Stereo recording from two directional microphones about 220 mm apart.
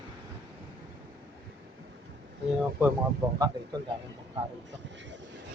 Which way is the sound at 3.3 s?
20° right (ahead or behind).